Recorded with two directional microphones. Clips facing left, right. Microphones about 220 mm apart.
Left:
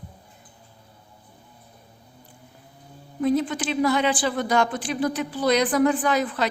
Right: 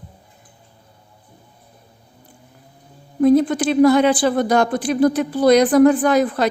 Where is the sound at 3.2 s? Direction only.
45° right (ahead or behind).